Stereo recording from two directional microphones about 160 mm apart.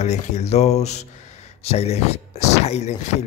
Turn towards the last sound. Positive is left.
turn(degrees=45)  # may be behind; listen again after turning